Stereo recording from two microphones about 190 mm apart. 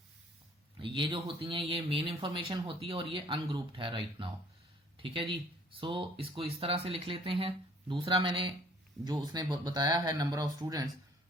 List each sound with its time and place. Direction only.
0.8 s speech: 25° right (ahead or behind)